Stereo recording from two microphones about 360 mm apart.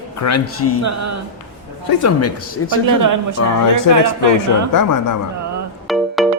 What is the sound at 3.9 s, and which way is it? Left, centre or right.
Speech, right.